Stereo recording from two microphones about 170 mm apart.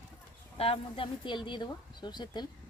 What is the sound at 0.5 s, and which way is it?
Speech, 35° left (ahead or behind).